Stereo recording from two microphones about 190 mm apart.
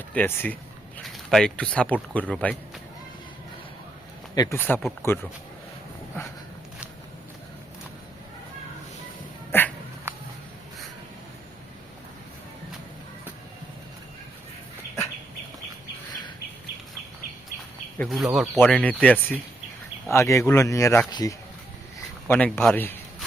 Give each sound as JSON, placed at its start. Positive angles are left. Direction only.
{"t": 0.1, "sound": "speech", "side_deg": 10}
{"t": 4.4, "sound": "speech", "side_deg": 15}
{"t": 9.5, "sound": "a sound", "side_deg": 10}
{"t": 10.1, "sound": "a sound", "side_deg": -10}
{"t": 17.9, "sound": "speech", "side_deg": 5}
{"t": 22.3, "sound": "speech", "side_deg": 10}